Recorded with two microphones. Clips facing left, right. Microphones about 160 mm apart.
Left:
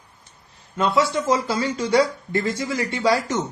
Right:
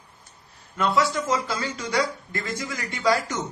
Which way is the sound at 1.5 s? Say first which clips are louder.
Left 7 dB; 30° left (ahead or behind).